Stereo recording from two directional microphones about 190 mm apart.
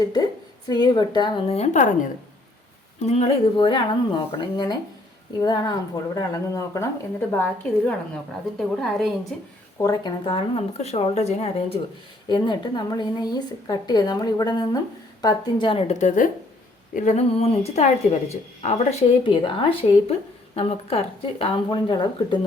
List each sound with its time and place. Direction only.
0.7 s speech: 20° left (ahead or behind); by 9.1 s centre (ahead or behind)
9.7 s speech: 20° left (ahead or behind)
12.3 s speech: 25° left (ahead or behind)
16.0 s speech: 40° left (ahead or behind); by 22.4 s 25° left (ahead or behind)